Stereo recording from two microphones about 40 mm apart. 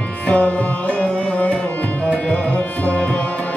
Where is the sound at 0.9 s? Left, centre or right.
Left.